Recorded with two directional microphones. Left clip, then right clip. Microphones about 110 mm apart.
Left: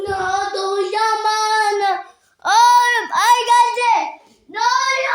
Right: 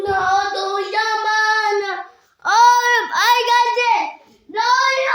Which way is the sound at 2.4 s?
30° left (ahead or behind).